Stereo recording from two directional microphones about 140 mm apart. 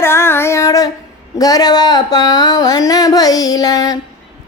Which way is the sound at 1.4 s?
25° left (ahead or behind).